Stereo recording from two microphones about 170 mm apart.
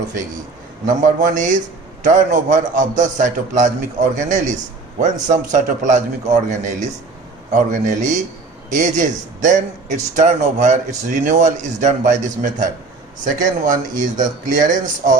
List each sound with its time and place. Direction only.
0.9 s a man's voice: 50° right (ahead or behind)